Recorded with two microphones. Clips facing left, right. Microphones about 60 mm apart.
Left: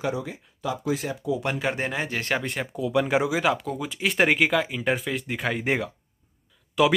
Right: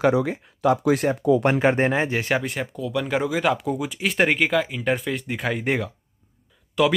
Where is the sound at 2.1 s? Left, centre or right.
Centre.